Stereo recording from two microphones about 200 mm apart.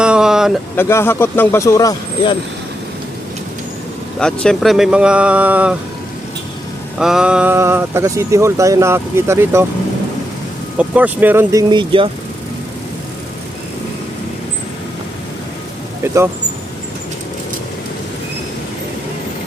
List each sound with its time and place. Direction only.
0.0 s a sound: 5° right (ahead or behind)
0.8 s speech: 10° left (ahead or behind)
4.2 s speech: 5° left (ahead or behind)
7.0 s speech: 5° right (ahead or behind)
10.8 s speech: 5° right (ahead or behind)
11.7 s speech: 25° right (ahead or behind)
16.0 s speech: 10° right (ahead or behind)